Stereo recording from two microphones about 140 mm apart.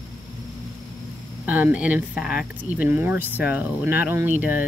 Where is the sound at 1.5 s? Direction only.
10° right (ahead or behind).